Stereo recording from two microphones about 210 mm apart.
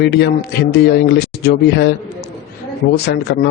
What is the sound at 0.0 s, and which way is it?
Speech, 55° left (ahead or behind).